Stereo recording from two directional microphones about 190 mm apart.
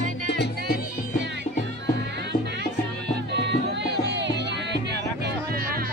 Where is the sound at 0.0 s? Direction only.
65° left (ahead or behind).